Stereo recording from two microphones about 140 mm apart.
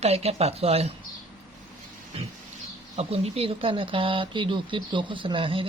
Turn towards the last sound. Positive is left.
turn(degrees=-40)  # may be behind; listen again after turning